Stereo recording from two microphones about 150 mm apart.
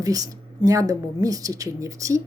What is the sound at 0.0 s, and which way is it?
Speech, 25° right (ahead or behind).